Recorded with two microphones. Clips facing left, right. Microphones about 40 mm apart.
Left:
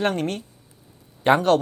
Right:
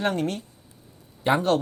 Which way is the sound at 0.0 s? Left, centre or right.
Left.